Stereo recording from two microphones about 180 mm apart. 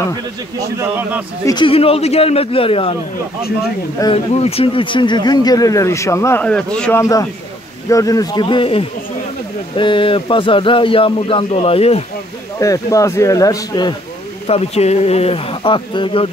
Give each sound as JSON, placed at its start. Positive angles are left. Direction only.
{"t": 0.6, "sound": "speech", "side_deg": -15}
{"t": 1.4, "sound": "speech", "side_deg": 25}
{"t": 4.0, "sound": "speech", "side_deg": 35}
{"t": 7.0, "sound": "speech", "side_deg": 20}
{"t": 12.5, "sound": "speech", "side_deg": 20}
{"t": 14.5, "sound": "speech", "side_deg": 35}